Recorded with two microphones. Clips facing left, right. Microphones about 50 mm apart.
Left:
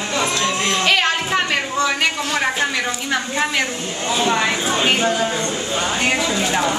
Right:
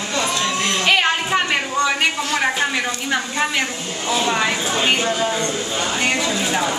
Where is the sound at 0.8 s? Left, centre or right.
Centre.